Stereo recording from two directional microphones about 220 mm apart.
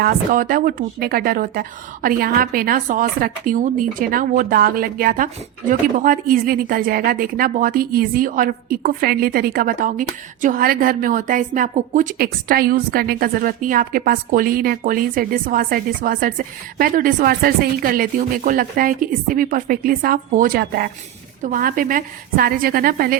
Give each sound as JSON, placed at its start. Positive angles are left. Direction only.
{"t": 0.0, "sound": "speech", "side_deg": -40}